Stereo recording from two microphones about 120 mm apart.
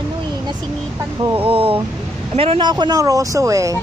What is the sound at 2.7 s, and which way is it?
Speech, 30° right (ahead or behind).